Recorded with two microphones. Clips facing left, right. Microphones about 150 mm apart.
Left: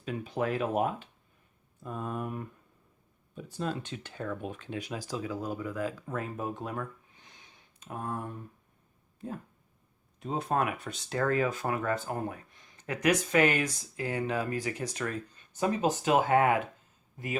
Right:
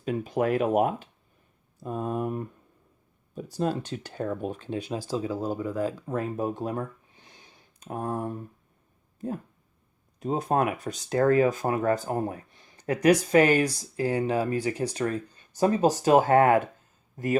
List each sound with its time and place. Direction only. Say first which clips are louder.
0.0 s speech: right 6 dB; 45° right (ahead or behind)
10.2 s speech: right 5 dB; 40° right (ahead or behind)